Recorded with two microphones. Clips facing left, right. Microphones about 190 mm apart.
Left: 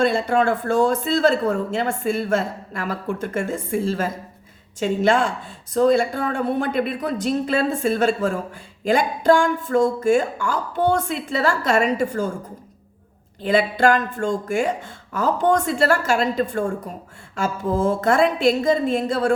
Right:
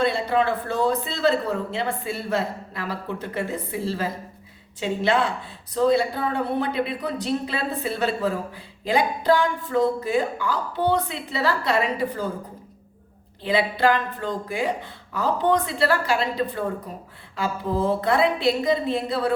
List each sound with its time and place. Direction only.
0.0 s speech: 45° left (ahead or behind)
13.4 s speech: 45° left (ahead or behind)